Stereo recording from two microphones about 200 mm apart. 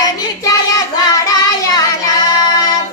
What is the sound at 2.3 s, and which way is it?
Child singing, 20° left (ahead or behind).